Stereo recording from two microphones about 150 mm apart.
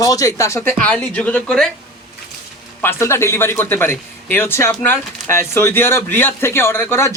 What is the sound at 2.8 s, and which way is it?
A man's voice, 15° left (ahead or behind).